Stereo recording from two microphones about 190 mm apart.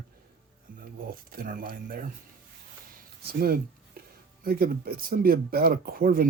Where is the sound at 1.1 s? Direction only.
50° right (ahead or behind).